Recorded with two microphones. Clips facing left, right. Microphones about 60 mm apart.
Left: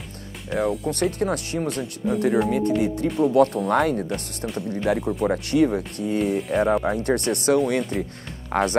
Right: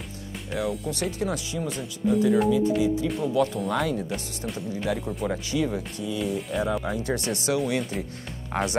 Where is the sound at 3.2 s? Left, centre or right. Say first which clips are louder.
Left 8 dB; left.